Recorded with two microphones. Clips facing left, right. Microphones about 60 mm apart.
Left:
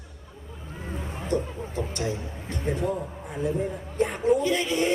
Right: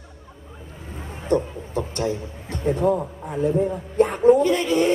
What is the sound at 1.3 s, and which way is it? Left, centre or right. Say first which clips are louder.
A man's voice: right 6 dB; right.